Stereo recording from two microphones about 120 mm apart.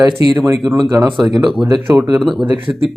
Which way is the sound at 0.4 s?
25° right (ahead or behind).